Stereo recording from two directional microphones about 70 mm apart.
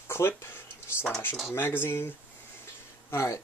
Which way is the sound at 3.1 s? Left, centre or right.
Left.